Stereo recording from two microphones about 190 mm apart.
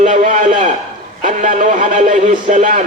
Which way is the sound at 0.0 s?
45° right (ahead or behind).